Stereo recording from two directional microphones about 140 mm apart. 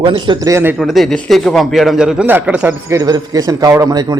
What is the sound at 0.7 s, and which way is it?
A man's voice, centre (ahead or behind).